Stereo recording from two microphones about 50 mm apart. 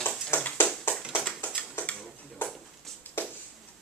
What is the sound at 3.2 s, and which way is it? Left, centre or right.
Music, left.